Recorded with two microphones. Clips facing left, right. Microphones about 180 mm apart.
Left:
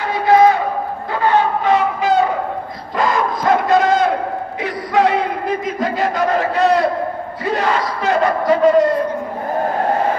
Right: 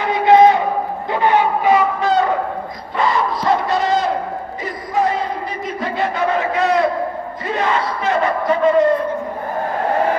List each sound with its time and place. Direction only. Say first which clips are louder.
0.0 s a sound: right 1 dB; 20° right (ahead or behind)
1.1 s vehicle: even; 15° right (ahead or behind)
1.8 s a sound: even; 5° left (ahead or behind)
3.0 s battle cry: left 1 dB; 50° left (ahead or behind)
4.6 s battle cry: left 3 dB; 75° left (ahead or behind)
5.8 s crowd: right 1 dB; 40° left (ahead or behind)
7.5 s battle cry: even; 35° left (ahead or behind)